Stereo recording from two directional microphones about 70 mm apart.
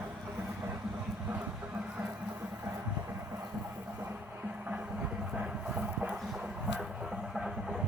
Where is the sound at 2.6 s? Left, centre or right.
Right.